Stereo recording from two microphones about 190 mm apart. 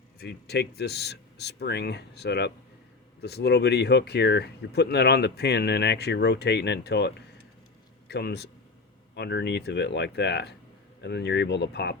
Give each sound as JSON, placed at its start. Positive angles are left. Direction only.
{"t": 0.2, "sound": "a man's voice", "side_deg": 60}